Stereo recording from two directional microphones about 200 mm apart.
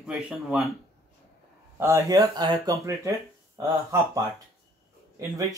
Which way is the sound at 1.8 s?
15° right (ahead or behind).